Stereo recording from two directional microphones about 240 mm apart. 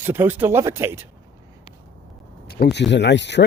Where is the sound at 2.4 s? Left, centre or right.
Left.